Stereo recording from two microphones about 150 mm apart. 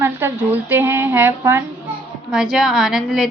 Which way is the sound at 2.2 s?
5° right (ahead or behind).